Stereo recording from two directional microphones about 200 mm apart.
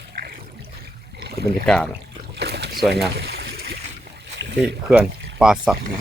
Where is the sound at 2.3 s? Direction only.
55° right (ahead or behind).